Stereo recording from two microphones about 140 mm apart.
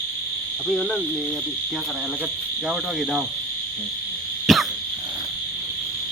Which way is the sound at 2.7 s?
Centre (ahead or behind).